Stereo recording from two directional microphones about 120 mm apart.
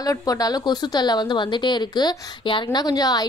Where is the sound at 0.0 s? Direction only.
30° left (ahead or behind).